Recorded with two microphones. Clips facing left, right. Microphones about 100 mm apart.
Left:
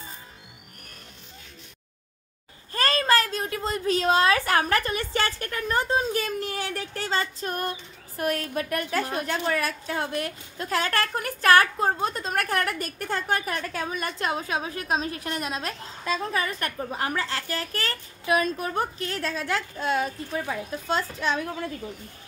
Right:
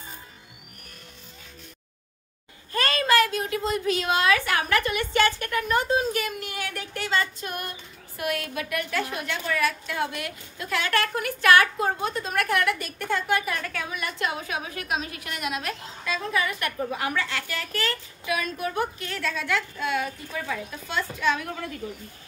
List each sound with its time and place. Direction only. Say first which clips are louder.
2.7 s a woman's voice: even; 35° left (ahead or behind)